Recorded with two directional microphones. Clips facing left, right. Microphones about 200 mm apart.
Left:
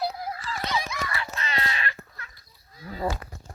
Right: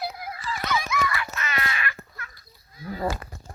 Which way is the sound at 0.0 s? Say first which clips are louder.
Left 2 dB; 35° left (ahead or behind).